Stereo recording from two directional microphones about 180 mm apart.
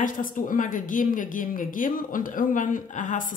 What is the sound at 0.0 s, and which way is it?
A woman's voice, 45° left (ahead or behind).